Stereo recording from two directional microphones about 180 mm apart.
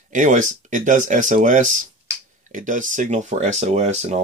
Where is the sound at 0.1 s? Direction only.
45° right (ahead or behind).